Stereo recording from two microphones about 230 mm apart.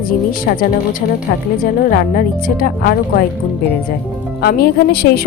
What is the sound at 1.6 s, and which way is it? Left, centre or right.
Speech, left.